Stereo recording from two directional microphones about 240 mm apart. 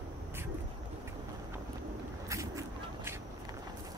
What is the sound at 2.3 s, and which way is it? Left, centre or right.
Walk, centre.